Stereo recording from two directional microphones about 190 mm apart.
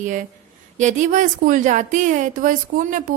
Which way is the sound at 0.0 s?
40° right (ahead or behind).